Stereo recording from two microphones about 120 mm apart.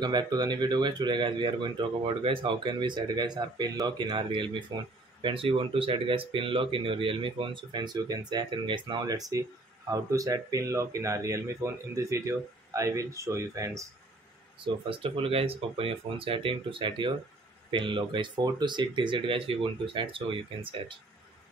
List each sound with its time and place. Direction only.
0.0 s speech: 40° right (ahead or behind)
14.9 s speech: 50° right (ahead or behind)